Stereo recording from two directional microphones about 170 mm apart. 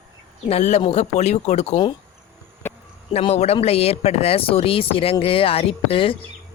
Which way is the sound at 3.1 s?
40° left (ahead or behind).